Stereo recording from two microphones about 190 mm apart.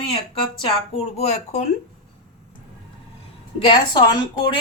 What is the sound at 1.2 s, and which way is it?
Speech, 35° left (ahead or behind).